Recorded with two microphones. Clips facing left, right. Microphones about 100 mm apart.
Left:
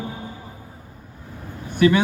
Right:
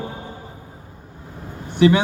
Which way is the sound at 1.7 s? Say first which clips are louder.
Right 2 dB; 25° right (ahead or behind).